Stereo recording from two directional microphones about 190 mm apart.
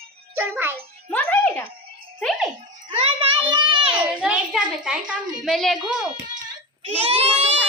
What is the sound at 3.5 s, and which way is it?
Speech, 25° right (ahead or behind).